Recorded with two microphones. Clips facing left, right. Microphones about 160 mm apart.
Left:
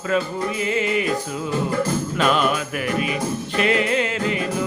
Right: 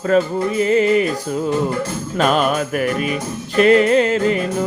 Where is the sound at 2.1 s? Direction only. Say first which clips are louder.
Right 5 dB; 45° right (ahead or behind).